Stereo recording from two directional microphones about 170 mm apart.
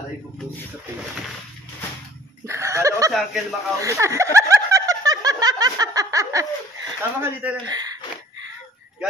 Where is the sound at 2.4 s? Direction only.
15° right (ahead or behind).